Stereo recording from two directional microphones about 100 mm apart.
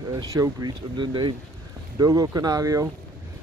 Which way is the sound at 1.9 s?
40° right (ahead or behind).